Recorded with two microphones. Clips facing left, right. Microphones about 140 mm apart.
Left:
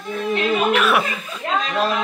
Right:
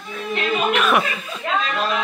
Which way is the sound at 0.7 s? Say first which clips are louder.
Right 2 dB; 5° left (ahead or behind).